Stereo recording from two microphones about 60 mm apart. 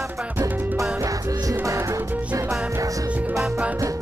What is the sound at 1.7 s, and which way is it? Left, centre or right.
Music, right.